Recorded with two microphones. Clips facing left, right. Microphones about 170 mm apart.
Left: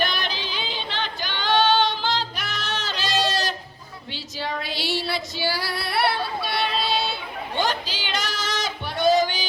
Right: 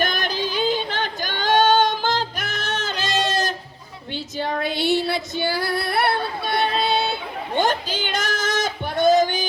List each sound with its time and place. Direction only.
0.0 s yodeling: 45° right (ahead or behind)
4.1 s female singing: 50° right (ahead or behind)
7.6 s a sound: 50° right (ahead or behind)